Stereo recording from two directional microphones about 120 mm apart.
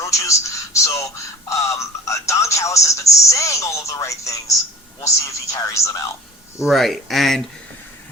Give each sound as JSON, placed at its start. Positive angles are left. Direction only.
{"t": 0.0, "sound": "speech", "side_deg": 25}
{"t": 6.7, "sound": "speech", "side_deg": 0}